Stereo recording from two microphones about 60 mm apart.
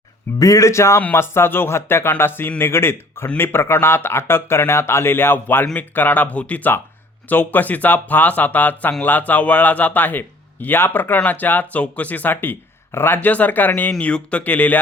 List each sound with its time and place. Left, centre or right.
0.3 s a man's voice: left
13.2 s speech: left
14.0 s speech: centre